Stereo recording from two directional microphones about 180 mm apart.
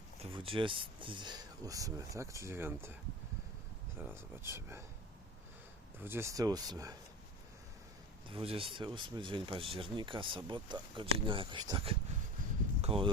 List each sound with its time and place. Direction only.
0.2 s speech: 30° right (ahead or behind); by 4.8 s 15° right (ahead or behind)
6.0 s speech: 15° right (ahead or behind)
8.3 s speech: 30° right (ahead or behind)
12.8 s a sound: 30° right (ahead or behind)